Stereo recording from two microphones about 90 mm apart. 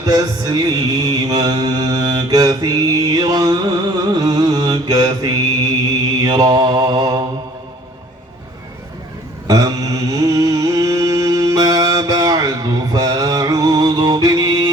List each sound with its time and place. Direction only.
0.0 s mantra: 50° right (ahead or behind)
9.5 s mantra: 40° right (ahead or behind)